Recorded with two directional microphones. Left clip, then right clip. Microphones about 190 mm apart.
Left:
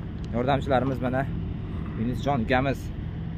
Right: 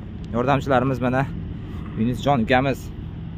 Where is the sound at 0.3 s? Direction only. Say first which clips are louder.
Right 4 dB; 40° right (ahead or behind); by 2.8 s 60° right (ahead or behind).